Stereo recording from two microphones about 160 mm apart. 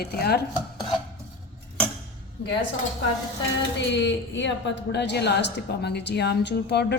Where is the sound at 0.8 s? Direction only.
Centre (ahead or behind).